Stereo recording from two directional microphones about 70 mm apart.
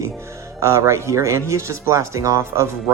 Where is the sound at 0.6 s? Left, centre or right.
Right.